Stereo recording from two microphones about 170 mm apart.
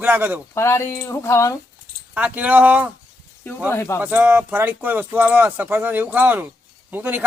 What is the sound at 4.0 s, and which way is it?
Speech, 10° right (ahead or behind).